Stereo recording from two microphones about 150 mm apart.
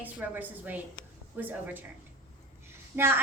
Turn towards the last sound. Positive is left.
turn(degrees=-15)  # may be behind; listen again after turning